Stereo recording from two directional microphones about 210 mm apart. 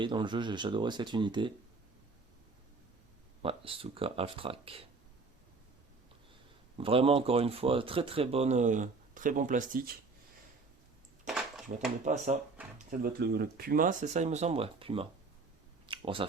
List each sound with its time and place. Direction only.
0.0 s speech: 20° right (ahead or behind)
3.4 s speech: 25° right (ahead or behind)
6.7 s speech: 25° right (ahead or behind); by 10.0 s 45° right (ahead or behind)
11.3 s dishes: centre (ahead or behind)
12.0 s speech: 35° right (ahead or behind)
12.9 s speech: 45° right (ahead or behind); by 15.0 s 25° right (ahead or behind)
15.9 s a sound: 25° right (ahead or behind)